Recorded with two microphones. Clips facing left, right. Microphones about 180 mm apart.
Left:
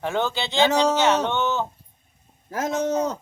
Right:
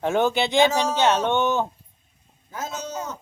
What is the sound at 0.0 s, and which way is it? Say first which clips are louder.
Speech: right 4 dB; 15° right (ahead or behind).